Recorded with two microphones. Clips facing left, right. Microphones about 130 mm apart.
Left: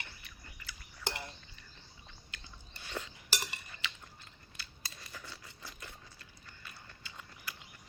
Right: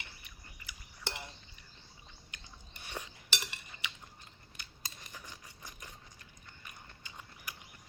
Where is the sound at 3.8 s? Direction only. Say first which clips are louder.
Left 1 dB; 15° right (ahead or behind).